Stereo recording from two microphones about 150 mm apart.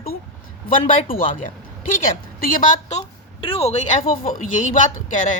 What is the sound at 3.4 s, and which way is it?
Speech, 40° left (ahead or behind).